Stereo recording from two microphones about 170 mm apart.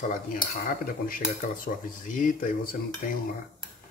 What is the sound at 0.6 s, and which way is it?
Speech, 55° left (ahead or behind).